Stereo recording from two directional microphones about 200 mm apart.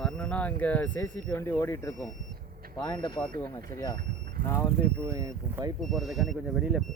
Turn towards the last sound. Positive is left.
turn(degrees=0)  # may be behind; listen again after turning